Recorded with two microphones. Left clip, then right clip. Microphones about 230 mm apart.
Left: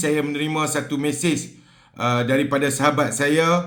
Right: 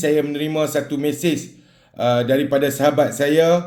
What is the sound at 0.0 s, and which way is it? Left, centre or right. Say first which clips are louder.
A man's voice: right 3 dB; centre.